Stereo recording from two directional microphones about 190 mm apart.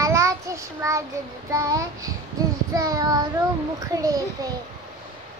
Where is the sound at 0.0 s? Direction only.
15° right (ahead or behind).